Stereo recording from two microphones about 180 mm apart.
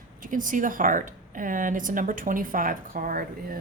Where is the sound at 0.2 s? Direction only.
45° right (ahead or behind).